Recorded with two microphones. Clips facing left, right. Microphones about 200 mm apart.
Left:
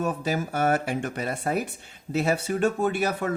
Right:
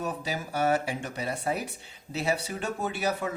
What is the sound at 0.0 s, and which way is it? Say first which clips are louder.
Speech: left 6 dB; 50° left (ahead or behind).